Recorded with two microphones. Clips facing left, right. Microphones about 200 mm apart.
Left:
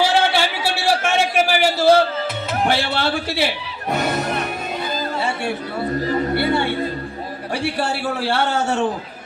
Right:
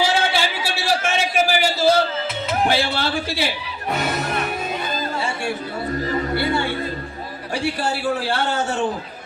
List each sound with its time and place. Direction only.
0.1 s a sound: 60° left (ahead or behind)
2.6 s a man's voice: 65° left (ahead or behind)
6.3 s a man's voice: 60° left (ahead or behind)